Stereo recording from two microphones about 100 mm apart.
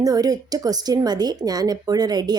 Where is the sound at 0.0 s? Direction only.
40° right (ahead or behind).